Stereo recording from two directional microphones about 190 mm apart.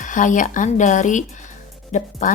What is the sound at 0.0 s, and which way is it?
Speech, 40° left (ahead or behind).